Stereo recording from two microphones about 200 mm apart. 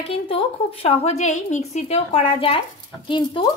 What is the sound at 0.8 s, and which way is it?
Speech, 35° left (ahead or behind).